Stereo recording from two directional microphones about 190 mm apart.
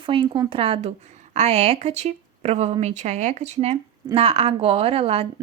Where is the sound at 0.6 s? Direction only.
30° right (ahead or behind).